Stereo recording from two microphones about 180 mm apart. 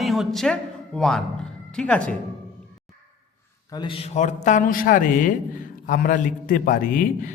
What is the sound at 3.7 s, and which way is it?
Speech, 25° left (ahead or behind).